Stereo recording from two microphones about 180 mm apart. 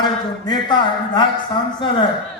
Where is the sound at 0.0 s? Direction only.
25° left (ahead or behind).